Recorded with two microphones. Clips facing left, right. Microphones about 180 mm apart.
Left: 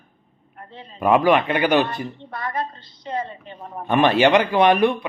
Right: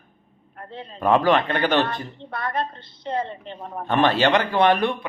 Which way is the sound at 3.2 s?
20° right (ahead or behind).